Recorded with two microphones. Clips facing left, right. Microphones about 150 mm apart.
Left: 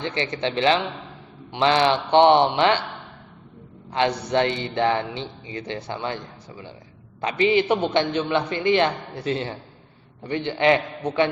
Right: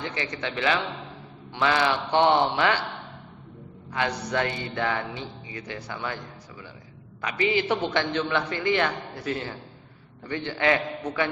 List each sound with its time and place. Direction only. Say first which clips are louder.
0.0 s a man's voice: left 6 dB; 25° left (ahead or behind)
3.9 s a man's voice: left 6 dB; 25° left (ahead or behind)
7.2 s a man's voice: left 5 dB; 25° left (ahead or behind)